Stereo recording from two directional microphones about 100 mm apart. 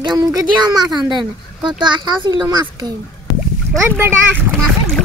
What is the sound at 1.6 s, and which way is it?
A child's voice, 50° right (ahead or behind).